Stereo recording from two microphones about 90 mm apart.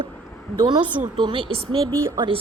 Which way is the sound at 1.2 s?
65° right (ahead or behind).